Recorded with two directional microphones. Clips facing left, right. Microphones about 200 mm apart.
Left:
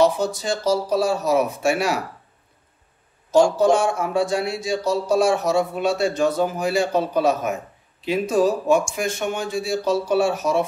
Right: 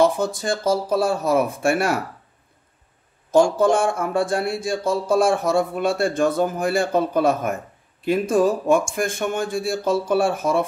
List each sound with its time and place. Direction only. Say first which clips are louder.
0.0 s speech: even; 50° right (ahead or behind)
3.3 s speech: even; 55° right (ahead or behind)